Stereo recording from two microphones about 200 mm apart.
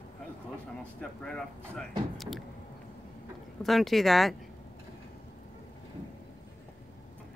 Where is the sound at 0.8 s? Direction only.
5° left (ahead or behind).